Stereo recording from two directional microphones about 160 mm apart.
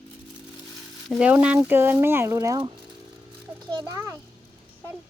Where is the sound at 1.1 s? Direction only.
10° right (ahead or behind).